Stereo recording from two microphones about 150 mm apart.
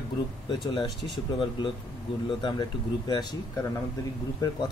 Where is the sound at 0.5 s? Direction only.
30° left (ahead or behind).